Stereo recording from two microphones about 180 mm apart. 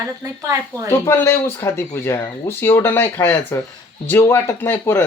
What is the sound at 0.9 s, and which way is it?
Speech, 15° left (ahead or behind).